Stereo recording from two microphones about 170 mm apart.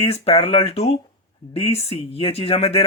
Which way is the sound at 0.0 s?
35° left (ahead or behind).